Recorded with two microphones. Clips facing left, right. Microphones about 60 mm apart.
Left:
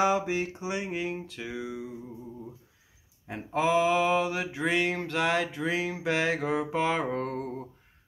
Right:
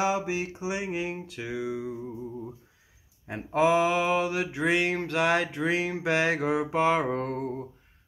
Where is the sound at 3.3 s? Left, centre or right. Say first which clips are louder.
Right 3 dB; centre.